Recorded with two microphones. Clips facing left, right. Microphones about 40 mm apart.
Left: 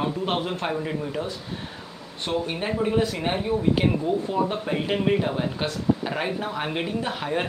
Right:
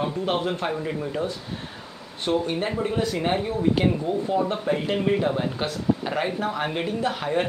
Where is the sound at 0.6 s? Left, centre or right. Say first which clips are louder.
Even; centre.